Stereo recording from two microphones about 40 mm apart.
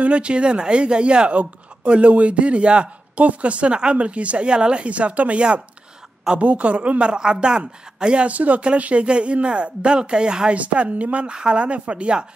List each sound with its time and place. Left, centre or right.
0.0 s speech: right
7.1 s speech: right
8.3 s speech: right
10.5 s speech: right